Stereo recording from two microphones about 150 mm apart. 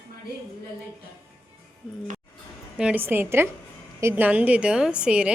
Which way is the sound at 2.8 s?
10° right (ahead or behind).